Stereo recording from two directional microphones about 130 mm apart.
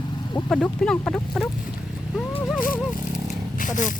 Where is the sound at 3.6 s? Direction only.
80° left.